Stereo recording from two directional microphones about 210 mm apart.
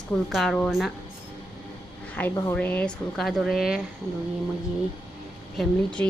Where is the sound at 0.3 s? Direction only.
Centre (ahead or behind).